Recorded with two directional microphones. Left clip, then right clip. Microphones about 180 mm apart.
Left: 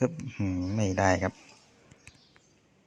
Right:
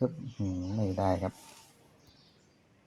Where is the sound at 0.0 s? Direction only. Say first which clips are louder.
Left 3 dB; 25° left (ahead or behind).